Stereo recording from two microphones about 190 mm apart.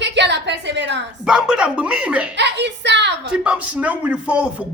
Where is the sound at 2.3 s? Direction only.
65° right (ahead or behind).